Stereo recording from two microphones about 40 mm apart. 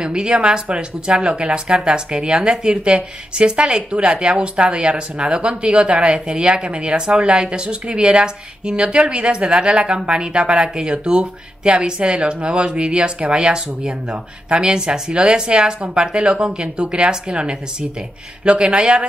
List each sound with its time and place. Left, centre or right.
0.0 s speech: right